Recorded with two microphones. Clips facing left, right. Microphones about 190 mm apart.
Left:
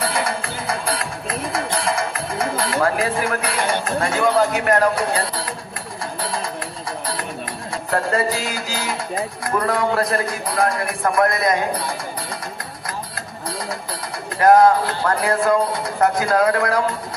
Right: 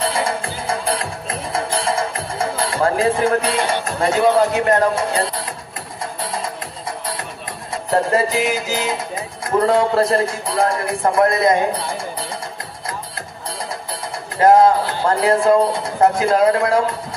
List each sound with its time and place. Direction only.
0.0 s music: 25° right (ahead or behind)
4.1 s a man's voice: 25° right (ahead or behind)
7.9 s a man's voice: 20° right (ahead or behind)
14.4 s a man's voice: 25° right (ahead or behind)